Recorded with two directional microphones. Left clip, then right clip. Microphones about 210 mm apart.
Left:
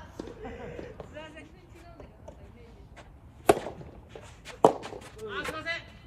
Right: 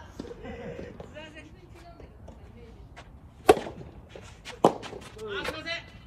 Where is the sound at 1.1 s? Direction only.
15° left (ahead or behind).